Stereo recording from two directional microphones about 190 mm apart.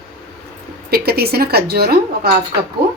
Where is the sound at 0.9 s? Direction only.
55° right (ahead or behind).